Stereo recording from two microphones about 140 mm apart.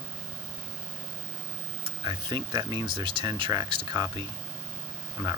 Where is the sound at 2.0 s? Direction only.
30° right (ahead or behind).